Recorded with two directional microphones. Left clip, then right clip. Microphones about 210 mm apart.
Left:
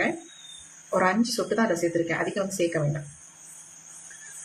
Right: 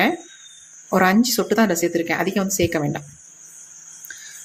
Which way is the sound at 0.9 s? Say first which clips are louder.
Right 6 dB; 50° right (ahead or behind).